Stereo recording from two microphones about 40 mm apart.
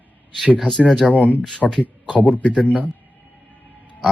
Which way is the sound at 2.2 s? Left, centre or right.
Left.